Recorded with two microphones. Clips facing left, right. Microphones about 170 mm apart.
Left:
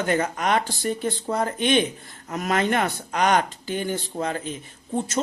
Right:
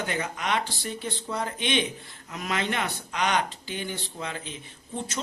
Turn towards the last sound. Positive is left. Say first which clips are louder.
# left 7 dB
turn(degrees=45)  # may be behind; listen again after turning